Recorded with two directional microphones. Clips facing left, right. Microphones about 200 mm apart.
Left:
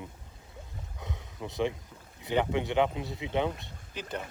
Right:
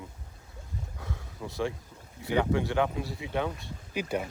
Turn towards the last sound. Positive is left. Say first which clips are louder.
# right 6 dB
turn(degrees=-10)  # may be behind; listen again after turning